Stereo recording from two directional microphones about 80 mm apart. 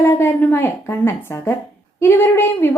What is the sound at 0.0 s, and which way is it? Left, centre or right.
A woman's voice, left.